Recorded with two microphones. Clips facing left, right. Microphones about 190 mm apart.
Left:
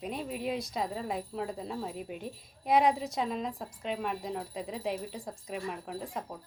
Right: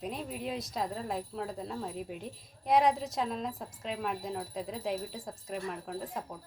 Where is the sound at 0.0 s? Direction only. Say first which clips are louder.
Left 2 dB; centre (ahead or behind).